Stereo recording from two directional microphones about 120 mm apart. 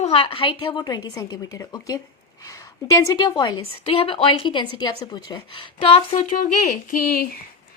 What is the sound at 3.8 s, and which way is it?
A woman's voice, 50° left (ahead or behind).